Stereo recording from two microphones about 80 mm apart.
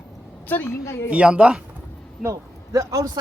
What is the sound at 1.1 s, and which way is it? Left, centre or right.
Speech, centre.